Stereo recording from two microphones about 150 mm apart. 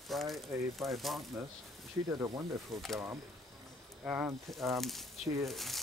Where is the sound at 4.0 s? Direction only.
10° right (ahead or behind).